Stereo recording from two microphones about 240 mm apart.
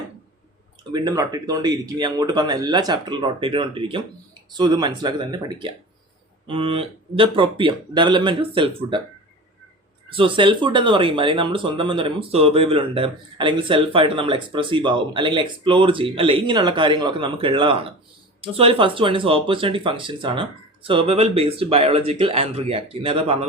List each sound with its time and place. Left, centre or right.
0.9 s speech: centre
10.1 s speech: right